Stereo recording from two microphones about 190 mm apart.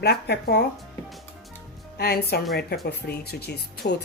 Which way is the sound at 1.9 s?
55° left (ahead or behind).